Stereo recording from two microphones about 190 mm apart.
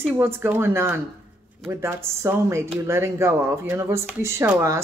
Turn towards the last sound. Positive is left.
turn(degrees=-15)  # may be behind; listen again after turning